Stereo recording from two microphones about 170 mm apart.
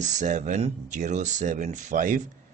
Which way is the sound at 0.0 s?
45° right (ahead or behind).